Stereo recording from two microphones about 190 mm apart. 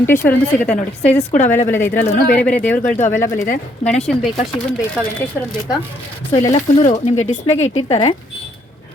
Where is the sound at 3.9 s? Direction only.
Centre (ahead or behind).